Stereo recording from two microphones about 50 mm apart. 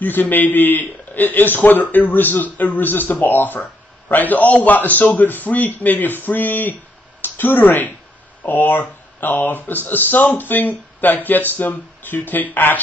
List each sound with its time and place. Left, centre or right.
0.0 s speech: left